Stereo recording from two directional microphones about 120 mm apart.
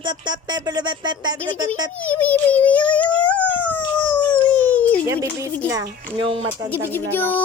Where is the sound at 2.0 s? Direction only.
10° left (ahead or behind).